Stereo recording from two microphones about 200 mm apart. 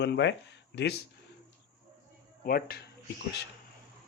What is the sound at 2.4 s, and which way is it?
Speech, 50° left (ahead or behind).